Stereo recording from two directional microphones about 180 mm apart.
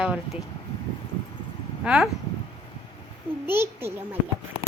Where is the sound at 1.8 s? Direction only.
5° right (ahead or behind).